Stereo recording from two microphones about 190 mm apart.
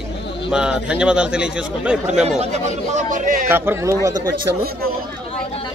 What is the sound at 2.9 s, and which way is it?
Speech, 40° right (ahead or behind).